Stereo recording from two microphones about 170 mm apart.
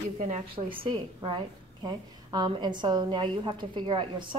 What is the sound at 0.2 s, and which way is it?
Speech, 40° right (ahead or behind).